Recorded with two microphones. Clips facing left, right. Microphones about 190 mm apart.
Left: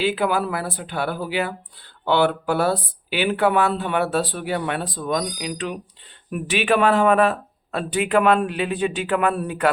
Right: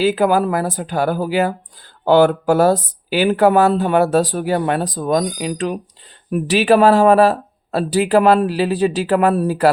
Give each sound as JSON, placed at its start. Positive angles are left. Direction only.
{"t": 0.0, "sound": "speech", "side_deg": -40}